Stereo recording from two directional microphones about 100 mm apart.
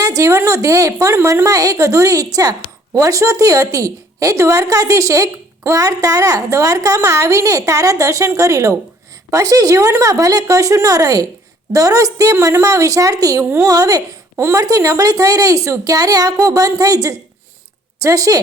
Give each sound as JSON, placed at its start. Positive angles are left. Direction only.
{"t": 0.0, "sound": "a woman's voice", "side_deg": -35}
{"t": 13.4, "sound": "speech", "side_deg": -25}
{"t": 13.7, "sound": "a woman's voice", "side_deg": -35}